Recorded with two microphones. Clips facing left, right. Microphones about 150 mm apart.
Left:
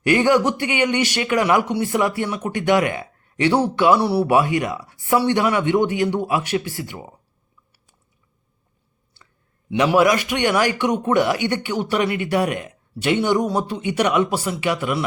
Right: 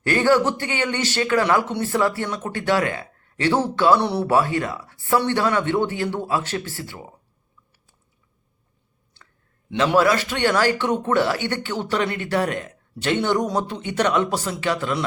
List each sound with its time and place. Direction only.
0.0 s speech: 15° left (ahead or behind)
9.2 s a sound: 10° left (ahead or behind)
9.6 s speech: 15° left (ahead or behind)